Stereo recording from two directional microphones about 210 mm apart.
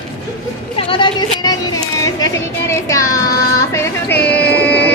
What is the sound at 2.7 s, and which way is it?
Child singing, 15° left (ahead or behind).